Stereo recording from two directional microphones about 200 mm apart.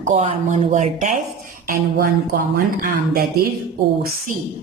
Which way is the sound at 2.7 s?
45° right (ahead or behind).